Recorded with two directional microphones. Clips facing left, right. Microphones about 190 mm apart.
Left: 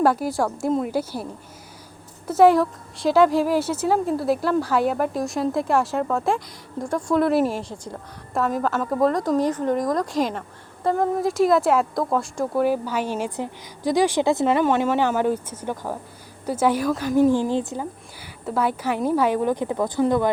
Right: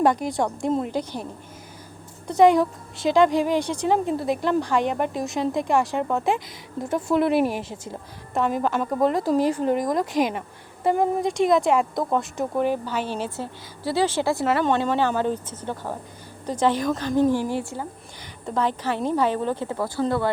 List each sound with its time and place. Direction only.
0.0 s a woman's voice: 5° left (ahead or behind)
9.9 s speech: 20° right (ahead or behind)
11.2 s a woman's voice: centre (ahead or behind); by 17.8 s 20° left (ahead or behind)
18.4 s a woman's voice: 10° left (ahead or behind)